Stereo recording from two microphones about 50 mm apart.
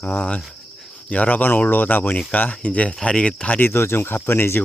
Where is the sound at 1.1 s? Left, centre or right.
Left.